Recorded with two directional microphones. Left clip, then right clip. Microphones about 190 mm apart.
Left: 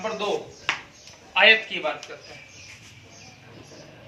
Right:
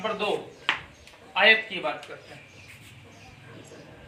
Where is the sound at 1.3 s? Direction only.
15° right (ahead or behind).